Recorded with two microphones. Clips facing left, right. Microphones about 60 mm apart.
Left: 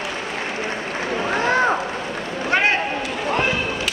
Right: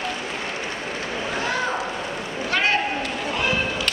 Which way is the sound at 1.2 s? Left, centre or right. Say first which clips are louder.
Left 7 dB; left.